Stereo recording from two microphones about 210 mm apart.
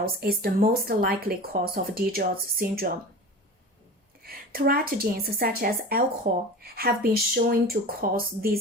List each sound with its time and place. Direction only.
0.0 s a woman's voice: 45° right (ahead or behind)
4.2 s a woman's voice: 45° right (ahead or behind)